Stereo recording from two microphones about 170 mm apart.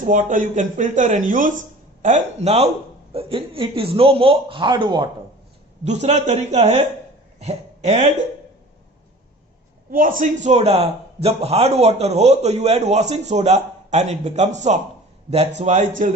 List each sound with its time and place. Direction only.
0.0 s a man's voice: 50° right (ahead or behind); by 5.0 s 25° right (ahead or behind)
5.8 s a man's voice: 40° right (ahead or behind)
9.9 s a man's voice: 55° right (ahead or behind)
10.4 s a man's voice: 40° right (ahead or behind)